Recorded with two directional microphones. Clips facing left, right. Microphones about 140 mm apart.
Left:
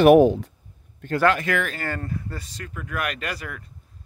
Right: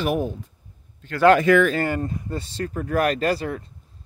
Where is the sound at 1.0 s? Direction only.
55° left (ahead or behind).